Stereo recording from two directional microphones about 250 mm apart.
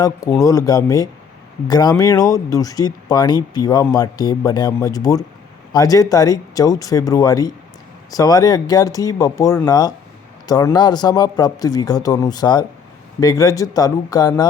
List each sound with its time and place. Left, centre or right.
0.0 s speech: centre